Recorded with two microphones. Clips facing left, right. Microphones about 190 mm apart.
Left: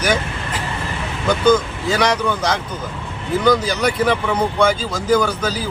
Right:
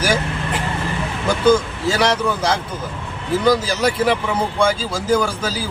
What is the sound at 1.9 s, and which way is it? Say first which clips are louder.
Speech: even; 5° right (ahead or behind).